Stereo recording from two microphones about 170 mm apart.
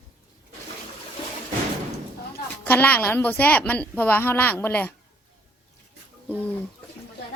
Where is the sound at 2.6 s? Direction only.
10° left (ahead or behind).